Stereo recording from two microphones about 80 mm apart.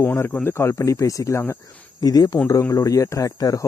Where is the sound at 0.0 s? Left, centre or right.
Left.